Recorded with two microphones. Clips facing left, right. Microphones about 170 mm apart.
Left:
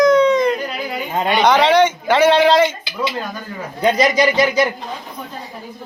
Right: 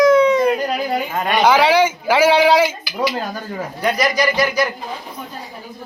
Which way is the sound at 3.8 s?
20° left (ahead or behind).